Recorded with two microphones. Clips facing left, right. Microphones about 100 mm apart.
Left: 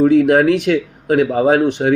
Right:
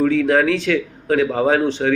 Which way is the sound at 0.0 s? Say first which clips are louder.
Left 5 dB; 20° left (ahead or behind).